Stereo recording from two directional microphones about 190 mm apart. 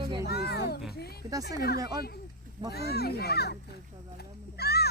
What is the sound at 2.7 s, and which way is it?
Speech, 55° left (ahead or behind).